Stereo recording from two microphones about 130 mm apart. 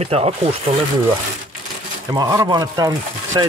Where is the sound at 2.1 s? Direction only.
30° right (ahead or behind).